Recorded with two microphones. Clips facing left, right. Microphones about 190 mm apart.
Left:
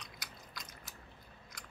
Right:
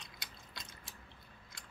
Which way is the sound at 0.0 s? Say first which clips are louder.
Left 3 dB; 25° right (ahead or behind).